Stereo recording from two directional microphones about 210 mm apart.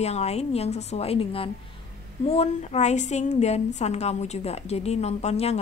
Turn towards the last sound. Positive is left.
turn(degrees=30)  # may be behind; listen again after turning